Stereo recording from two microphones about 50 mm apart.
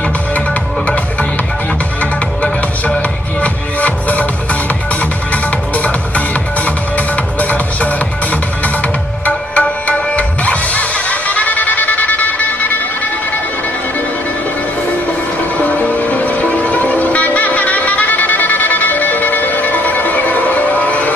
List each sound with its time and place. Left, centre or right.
3.8 s music: left
5.3 s music: left
15.6 s music: left